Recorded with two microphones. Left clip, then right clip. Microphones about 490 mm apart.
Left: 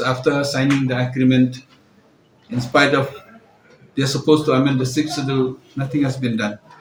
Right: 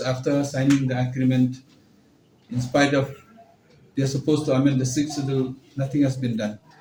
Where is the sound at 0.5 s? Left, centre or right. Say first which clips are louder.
Left 3 dB; right.